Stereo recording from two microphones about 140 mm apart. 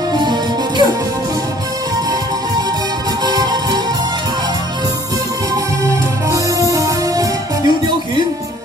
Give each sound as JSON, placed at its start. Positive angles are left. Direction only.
{"t": 0.1, "sound": "music", "side_deg": -30}
{"t": 3.3, "sound": "music", "side_deg": -30}
{"t": 5.5, "sound": "music", "side_deg": -25}